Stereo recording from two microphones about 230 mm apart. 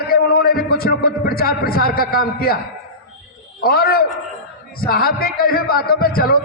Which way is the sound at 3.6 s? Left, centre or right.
Left.